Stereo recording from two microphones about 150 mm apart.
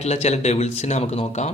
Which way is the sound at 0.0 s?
45° left (ahead or behind).